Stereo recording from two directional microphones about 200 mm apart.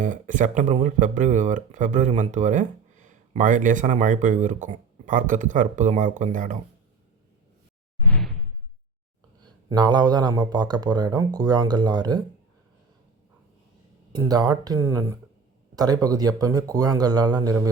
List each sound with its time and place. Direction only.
0.0 s speech: 40° right (ahead or behind)
9.6 s speech: 20° right (ahead or behind)
14.1 s speech: 20° right (ahead or behind)